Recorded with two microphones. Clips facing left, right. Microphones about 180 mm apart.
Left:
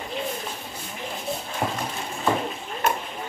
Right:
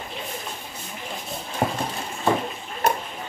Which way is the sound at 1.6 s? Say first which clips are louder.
Right 3 dB; 25° right (ahead or behind).